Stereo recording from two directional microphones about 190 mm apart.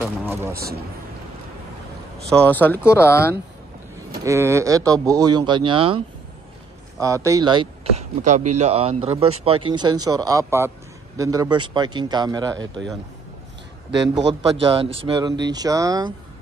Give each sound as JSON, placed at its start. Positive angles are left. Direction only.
{"t": 0.0, "sound": "speech", "side_deg": -10}
{"t": 2.2, "sound": "speech", "side_deg": 10}
{"t": 4.1, "sound": "speech", "side_deg": -15}
{"t": 7.0, "sound": "speech", "side_deg": -15}
{"t": 8.0, "sound": "a man's voice", "side_deg": -40}
{"t": 14.6, "sound": "speech", "side_deg": -30}